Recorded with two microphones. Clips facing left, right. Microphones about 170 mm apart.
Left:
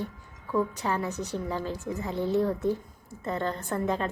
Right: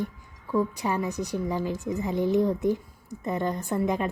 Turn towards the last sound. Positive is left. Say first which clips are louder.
# right 2 dB
turn(degrees=-15)  # may be behind; listen again after turning